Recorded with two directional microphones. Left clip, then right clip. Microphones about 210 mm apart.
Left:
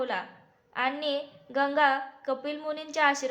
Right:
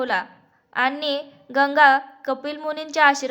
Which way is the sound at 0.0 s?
25° right (ahead or behind).